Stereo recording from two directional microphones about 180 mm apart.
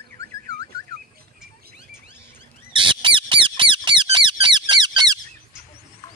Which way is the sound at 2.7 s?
25° right (ahead or behind).